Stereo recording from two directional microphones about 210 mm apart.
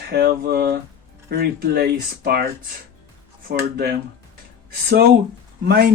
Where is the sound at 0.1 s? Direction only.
50° right (ahead or behind).